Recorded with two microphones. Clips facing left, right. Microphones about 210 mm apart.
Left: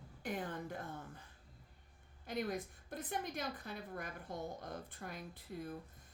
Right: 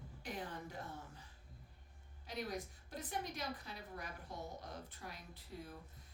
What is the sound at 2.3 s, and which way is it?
A woman's voice, 55° left (ahead or behind).